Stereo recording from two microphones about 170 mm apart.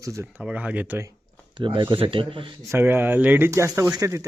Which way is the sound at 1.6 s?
30° right (ahead or behind).